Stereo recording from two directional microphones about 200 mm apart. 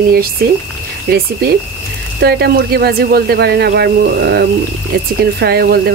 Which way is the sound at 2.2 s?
50° right (ahead or behind).